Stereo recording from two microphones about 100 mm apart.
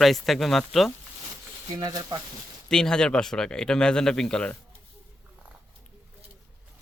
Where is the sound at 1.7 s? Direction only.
45° right (ahead or behind).